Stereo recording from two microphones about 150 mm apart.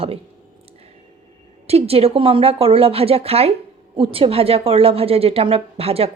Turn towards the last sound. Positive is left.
turn(degrees=-40)  # may be behind; listen again after turning